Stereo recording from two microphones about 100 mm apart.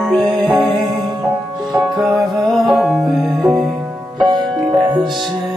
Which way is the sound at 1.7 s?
Centre (ahead or behind).